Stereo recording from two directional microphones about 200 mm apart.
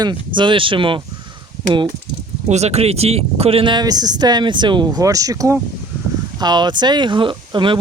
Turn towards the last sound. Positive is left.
turn(degrees=-25)  # may be behind; listen again after turning